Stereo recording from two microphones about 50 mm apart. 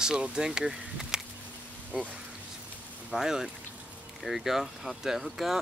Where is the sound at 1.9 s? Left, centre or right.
Right.